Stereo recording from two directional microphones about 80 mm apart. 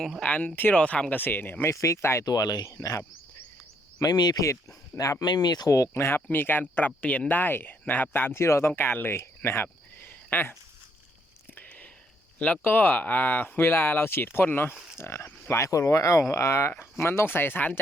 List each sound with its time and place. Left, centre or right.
0.2 s speech: centre
1.2 s speech: left
1.7 s speech: left
2.2 s speech: left
2.7 s speech: left
4.0 s speech: left
4.9 s speech: left
5.2 s speech: left
5.7 s speech: left
11.5 s a sound: centre
12.4 s speech: centre